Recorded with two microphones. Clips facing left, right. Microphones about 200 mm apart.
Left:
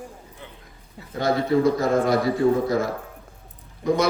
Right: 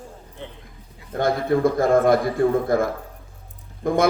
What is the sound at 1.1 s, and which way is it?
A man's voice, 55° right (ahead or behind).